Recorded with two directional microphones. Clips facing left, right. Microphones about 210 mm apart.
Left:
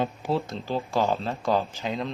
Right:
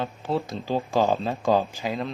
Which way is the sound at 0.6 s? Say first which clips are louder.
Right 4 dB; 15° right (ahead or behind).